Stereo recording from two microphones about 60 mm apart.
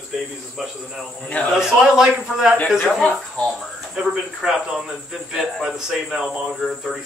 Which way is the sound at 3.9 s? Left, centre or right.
Centre.